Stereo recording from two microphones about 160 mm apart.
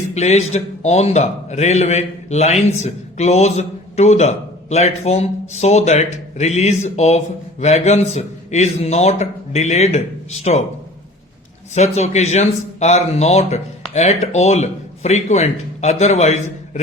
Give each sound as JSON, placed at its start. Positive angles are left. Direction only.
{"t": 0.1, "sound": "a man's voice", "side_deg": 45}
{"t": 11.7, "sound": "a man's voice", "side_deg": 45}